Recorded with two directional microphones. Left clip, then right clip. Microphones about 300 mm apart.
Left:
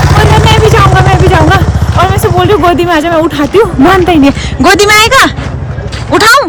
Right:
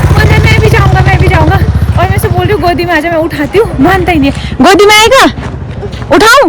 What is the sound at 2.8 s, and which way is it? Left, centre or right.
Speech, centre.